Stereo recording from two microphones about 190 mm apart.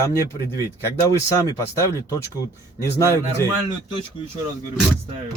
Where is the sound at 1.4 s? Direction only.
15° left (ahead or behind).